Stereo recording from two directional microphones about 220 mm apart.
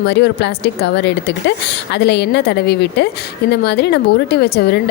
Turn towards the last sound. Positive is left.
turn(degrees=45)  # may be behind; listen again after turning